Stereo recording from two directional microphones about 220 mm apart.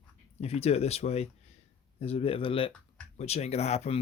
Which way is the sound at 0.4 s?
30° left (ahead or behind).